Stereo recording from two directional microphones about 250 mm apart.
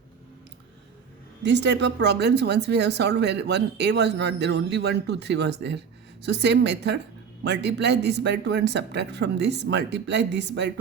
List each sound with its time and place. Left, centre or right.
1.5 s speech: right